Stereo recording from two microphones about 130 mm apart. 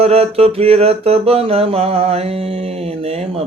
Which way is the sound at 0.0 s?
50° right (ahead or behind).